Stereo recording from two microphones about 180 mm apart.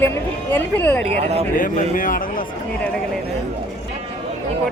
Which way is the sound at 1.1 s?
35° right (ahead or behind).